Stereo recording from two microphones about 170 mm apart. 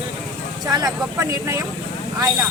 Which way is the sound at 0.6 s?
20° right (ahead or behind).